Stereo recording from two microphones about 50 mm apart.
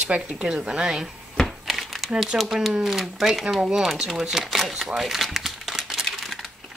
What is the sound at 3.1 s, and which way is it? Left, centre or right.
Speech, centre.